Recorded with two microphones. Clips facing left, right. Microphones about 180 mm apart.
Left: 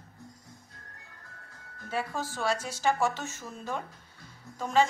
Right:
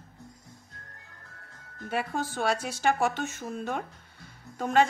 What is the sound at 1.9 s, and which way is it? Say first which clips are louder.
A woman's voice: right 2 dB; 60° right (ahead or behind).